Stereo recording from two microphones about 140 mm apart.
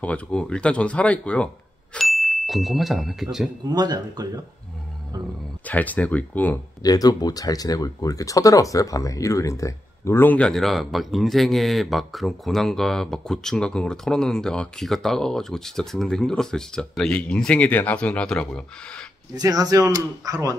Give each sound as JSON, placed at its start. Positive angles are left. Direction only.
{"t": 0.0, "sound": "speech", "side_deg": 10}
{"t": 3.6, "sound": "speech", "side_deg": -30}
{"t": 5.7, "sound": "speech", "side_deg": 10}
{"t": 6.8, "sound": "speech", "side_deg": 25}
{"t": 19.3, "sound": "speech", "side_deg": -25}